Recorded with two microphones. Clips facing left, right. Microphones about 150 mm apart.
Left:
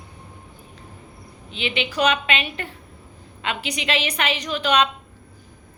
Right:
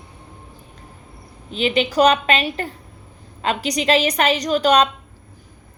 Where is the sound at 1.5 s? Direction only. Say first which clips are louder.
Right 7 dB; 40° right (ahead or behind).